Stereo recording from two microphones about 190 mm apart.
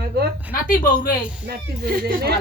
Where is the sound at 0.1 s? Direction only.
60° right (ahead or behind).